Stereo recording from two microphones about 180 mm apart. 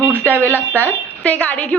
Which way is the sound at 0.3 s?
10° left (ahead or behind).